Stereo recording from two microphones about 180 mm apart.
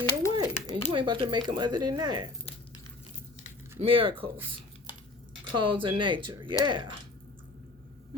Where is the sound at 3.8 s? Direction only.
30° right (ahead or behind).